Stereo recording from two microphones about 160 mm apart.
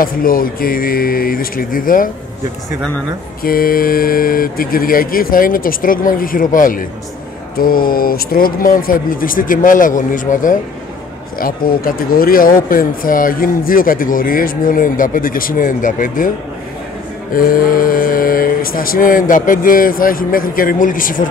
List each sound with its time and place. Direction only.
0.0 s speech: 65° left (ahead or behind)
3.4 s speech: 65° left (ahead or behind)
17.3 s speech: 65° left (ahead or behind)